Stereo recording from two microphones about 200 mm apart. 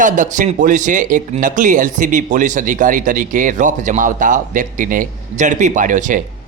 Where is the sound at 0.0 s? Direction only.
40° right (ahead or behind).